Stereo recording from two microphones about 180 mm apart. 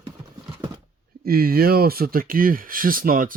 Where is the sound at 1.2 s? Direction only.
55° right (ahead or behind).